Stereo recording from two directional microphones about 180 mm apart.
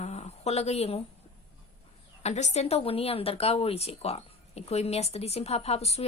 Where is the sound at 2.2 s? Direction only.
40° left (ahead or behind).